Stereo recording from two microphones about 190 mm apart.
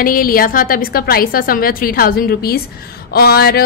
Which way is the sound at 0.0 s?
50° left (ahead or behind).